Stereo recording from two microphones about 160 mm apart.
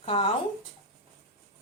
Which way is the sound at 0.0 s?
35° left (ahead or behind).